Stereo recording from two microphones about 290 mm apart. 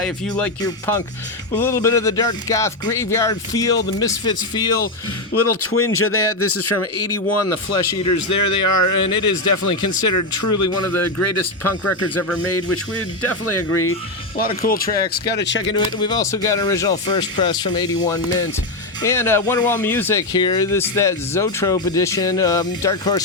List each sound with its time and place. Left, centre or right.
0.0 s speech: centre
5.3 s speech: left
14.3 s speech: left
15.7 s speech: centre